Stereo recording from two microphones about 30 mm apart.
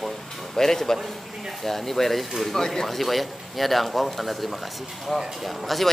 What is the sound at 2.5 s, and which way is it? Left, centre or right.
Speech, centre.